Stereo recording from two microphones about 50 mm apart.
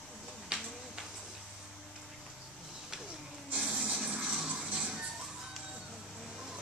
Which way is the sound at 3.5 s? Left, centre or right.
Centre.